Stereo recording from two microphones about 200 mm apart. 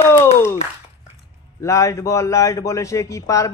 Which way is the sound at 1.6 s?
15° left (ahead or behind).